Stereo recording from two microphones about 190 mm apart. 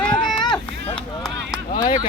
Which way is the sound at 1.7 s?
20° left (ahead or behind).